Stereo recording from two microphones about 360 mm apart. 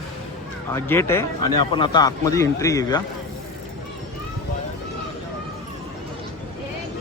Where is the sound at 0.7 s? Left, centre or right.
Centre.